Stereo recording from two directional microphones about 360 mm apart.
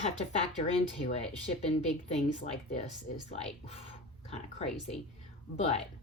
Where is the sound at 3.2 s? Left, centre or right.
Centre.